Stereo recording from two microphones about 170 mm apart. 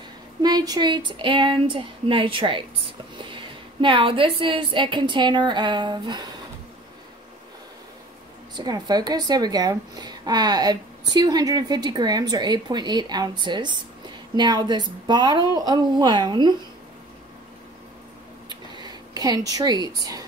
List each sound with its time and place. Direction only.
0.4 s speech: 25° right (ahead or behind)
8.5 s speech: 25° right (ahead or behind)
18.5 s a sound: 25° right (ahead or behind)